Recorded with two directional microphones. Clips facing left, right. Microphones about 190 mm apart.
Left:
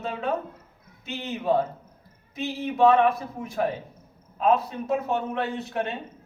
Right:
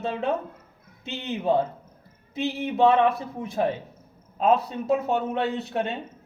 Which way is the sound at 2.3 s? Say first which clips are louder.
Right 2 dB; 25° right (ahead or behind).